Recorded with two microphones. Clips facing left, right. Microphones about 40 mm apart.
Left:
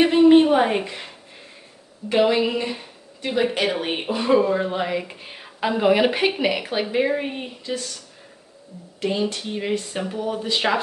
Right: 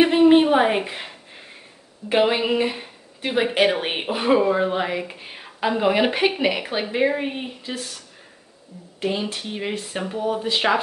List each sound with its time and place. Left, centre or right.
0.0 s a sound: centre
2.0 s speech: right
9.0 s speech: centre